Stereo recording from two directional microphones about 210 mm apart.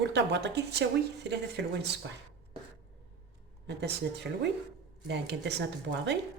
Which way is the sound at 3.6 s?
55° right (ahead or behind).